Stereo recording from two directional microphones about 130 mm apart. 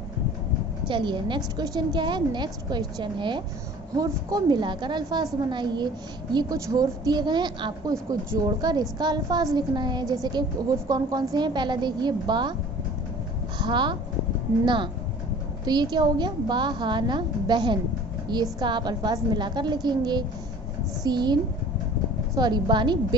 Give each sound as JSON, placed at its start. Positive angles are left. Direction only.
{"t": 0.8, "sound": "a woman's voice", "side_deg": -35}
{"t": 13.6, "sound": "a woman's voice", "side_deg": -35}